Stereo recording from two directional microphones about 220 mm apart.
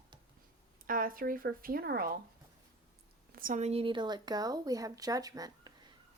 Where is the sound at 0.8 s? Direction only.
40° right (ahead or behind).